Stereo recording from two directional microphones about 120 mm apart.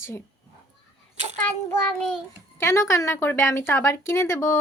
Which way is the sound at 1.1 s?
70° right (ahead or behind).